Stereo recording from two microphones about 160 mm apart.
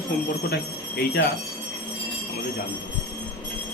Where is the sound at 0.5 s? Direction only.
90° left.